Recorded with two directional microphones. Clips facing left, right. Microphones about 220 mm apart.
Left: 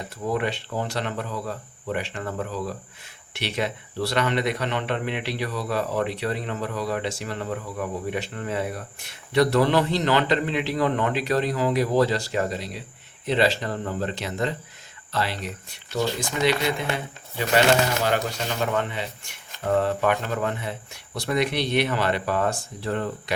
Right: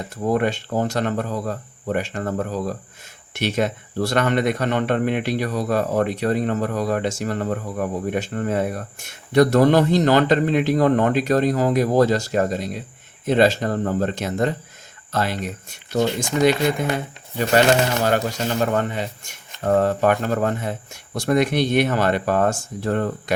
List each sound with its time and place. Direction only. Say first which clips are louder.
0.3 s speech: right 6 dB; 45° right (ahead or behind)